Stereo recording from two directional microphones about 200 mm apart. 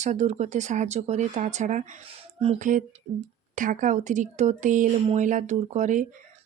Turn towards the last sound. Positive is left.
turn(degrees=-40)  # may be behind; listen again after turning